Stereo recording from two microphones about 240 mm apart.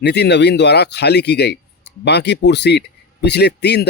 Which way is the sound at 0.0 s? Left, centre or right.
Left.